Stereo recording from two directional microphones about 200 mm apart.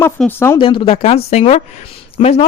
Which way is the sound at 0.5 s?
25° left (ahead or behind).